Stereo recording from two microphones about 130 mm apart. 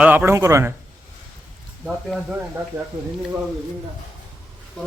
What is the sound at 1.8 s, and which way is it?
Speech, 5° right (ahead or behind).